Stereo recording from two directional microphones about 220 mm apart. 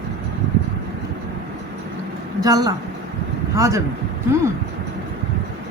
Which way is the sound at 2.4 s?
15° right (ahead or behind).